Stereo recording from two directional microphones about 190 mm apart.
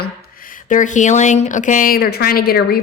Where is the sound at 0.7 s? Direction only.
40° left (ahead or behind).